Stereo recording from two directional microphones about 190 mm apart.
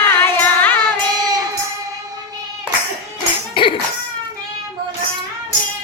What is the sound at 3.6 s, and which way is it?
Cough, 25° left (ahead or behind).